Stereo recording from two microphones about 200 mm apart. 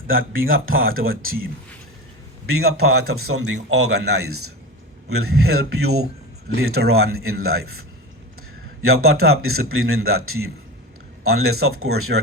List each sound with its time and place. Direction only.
0.1 s speech: 85° right
2.6 s speech: 90° right